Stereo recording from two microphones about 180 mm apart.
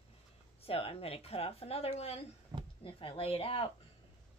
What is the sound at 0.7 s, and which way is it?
Speech, 30° left (ahead or behind).